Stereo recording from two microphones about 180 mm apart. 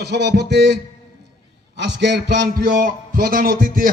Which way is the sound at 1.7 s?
70° right (ahead or behind).